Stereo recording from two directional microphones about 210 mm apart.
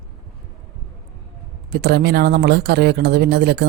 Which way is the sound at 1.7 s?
50° right (ahead or behind).